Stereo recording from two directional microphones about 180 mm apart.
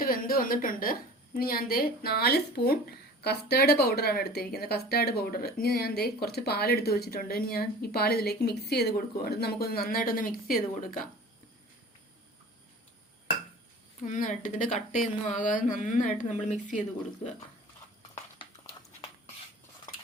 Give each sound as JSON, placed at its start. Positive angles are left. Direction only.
{"t": 0.0, "sound": "a woman's voice", "side_deg": 55}
{"t": 14.0, "sound": "speech", "side_deg": 45}